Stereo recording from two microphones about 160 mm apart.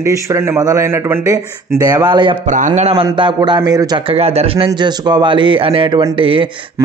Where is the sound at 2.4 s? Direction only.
50° right (ahead or behind).